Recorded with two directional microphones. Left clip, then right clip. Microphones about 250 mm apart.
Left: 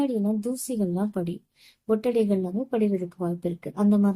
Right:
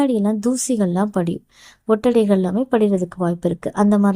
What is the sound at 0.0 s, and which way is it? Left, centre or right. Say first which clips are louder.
Speech: right 8 dB; right.